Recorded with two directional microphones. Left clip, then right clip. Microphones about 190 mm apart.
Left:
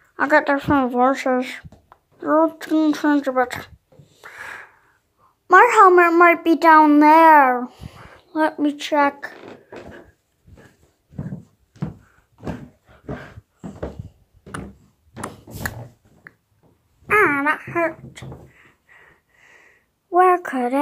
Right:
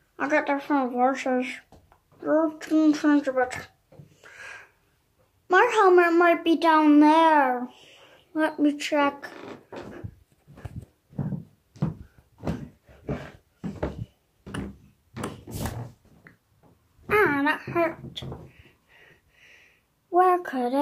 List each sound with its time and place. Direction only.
0.1 s speech: 25° left (ahead or behind)
4.2 s a sound: 25° left (ahead or behind)
5.5 s a child's voice: 20° left (ahead or behind)
6.5 s a child's voice: 20° left (ahead or behind)
17.1 s a sound: 10° left (ahead or behind)
20.1 s speech: 20° left (ahead or behind)